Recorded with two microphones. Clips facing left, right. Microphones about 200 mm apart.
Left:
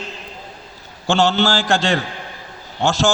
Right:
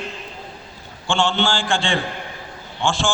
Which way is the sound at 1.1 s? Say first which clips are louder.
Left 4 dB; 40° left (ahead or behind).